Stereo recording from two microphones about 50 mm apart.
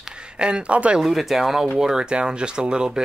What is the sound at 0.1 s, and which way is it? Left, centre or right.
Speech, centre.